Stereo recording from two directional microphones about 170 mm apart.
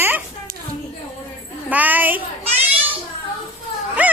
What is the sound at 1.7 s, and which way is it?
Speech, 10° right (ahead or behind).